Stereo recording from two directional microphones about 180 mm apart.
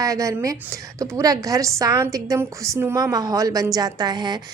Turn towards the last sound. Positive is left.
turn(degrees=-25)  # may be behind; listen again after turning